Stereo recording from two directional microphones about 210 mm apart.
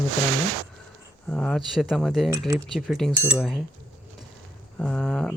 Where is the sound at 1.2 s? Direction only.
5° left (ahead or behind).